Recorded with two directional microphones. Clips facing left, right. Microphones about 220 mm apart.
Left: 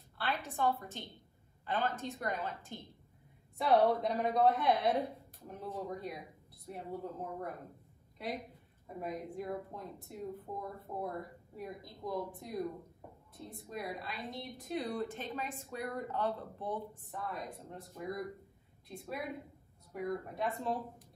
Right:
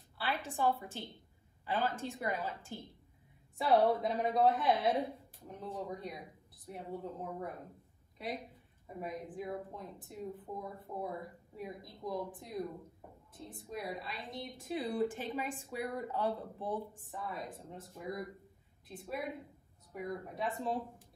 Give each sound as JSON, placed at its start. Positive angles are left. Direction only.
{"t": 0.3, "sound": "a woman's voice", "side_deg": -30}
{"t": 0.6, "sound": "speech", "side_deg": -10}
{"t": 3.5, "sound": "speech", "side_deg": 0}
{"t": 17.1, "sound": "speech", "side_deg": 0}